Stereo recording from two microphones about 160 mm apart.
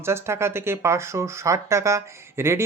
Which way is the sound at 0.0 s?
15° right (ahead or behind).